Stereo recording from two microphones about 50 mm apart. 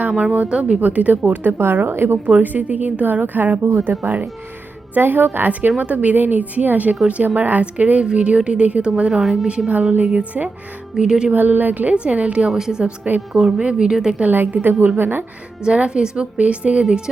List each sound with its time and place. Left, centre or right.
0.2 s a woman's voice: right
0.8 s a woman's voice: right
2.2 s a woman's voice: right
9.1 s a woman's voice: centre
10.1 s a woman's voice: right
10.9 s a woman's voice: centre
11.3 s a woman's voice: right
12.5 s a woman's voice: centre
14.2 s a woman's voice: right
15.6 s a woman's voice: centre